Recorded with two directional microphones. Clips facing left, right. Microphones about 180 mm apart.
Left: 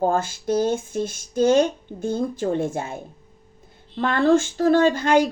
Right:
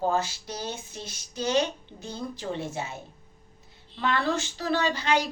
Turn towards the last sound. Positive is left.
turn(degrees=50)  # may be behind; listen again after turning